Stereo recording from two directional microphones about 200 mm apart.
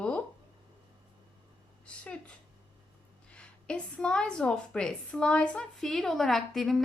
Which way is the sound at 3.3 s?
5° left (ahead or behind).